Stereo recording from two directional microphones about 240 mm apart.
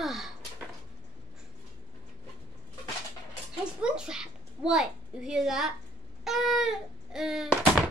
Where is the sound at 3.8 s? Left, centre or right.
Centre.